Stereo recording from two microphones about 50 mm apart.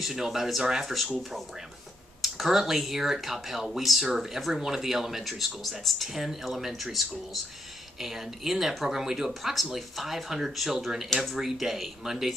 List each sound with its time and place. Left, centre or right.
0.0 s speech: centre
2.2 s speech: centre